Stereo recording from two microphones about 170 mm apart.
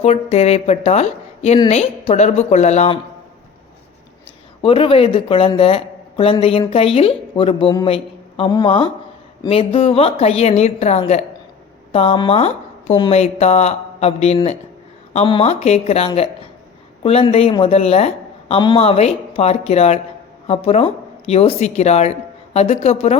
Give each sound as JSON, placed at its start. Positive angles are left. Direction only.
{"t": 0.0, "sound": "a woman's voice", "side_deg": 40}
{"t": 4.6, "sound": "a woman's voice", "side_deg": 30}